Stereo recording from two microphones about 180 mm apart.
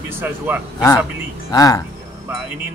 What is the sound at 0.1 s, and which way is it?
Speech, 10° right (ahead or behind).